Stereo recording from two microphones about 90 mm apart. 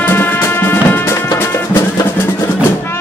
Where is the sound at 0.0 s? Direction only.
25° left (ahead or behind).